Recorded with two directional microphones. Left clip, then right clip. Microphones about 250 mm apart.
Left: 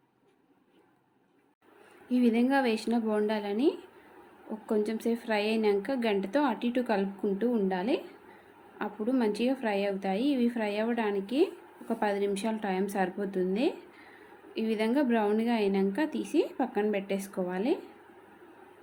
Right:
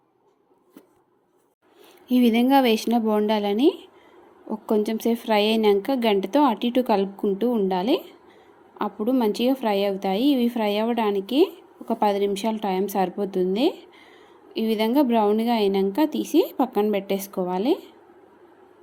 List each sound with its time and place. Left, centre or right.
2.0 s a woman's voice: right